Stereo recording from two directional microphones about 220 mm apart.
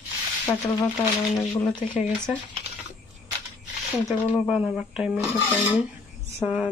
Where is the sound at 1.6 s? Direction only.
5° left (ahead or behind).